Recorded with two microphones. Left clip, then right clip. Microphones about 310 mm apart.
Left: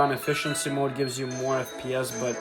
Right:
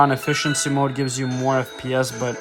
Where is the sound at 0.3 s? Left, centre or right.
Right.